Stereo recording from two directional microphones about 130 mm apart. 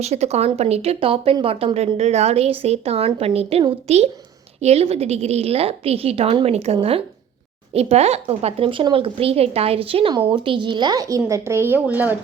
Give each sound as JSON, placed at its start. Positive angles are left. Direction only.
{"t": 0.0, "sound": "a woman's voice", "side_deg": -55}